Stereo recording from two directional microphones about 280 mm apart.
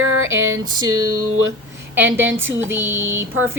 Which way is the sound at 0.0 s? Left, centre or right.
Right.